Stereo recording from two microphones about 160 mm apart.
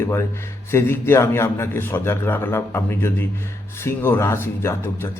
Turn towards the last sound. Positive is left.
turn(degrees=15)  # may be behind; listen again after turning